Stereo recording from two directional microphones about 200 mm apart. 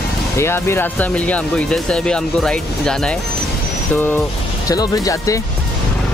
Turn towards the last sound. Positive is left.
turn(degrees=15)  # may be behind; listen again after turning